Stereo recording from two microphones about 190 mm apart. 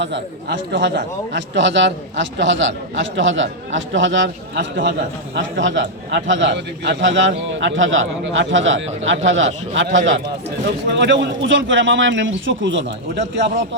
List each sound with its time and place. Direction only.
0.0 s speech: 70° right (ahead or behind)
10.8 s speech: 70° right (ahead or behind)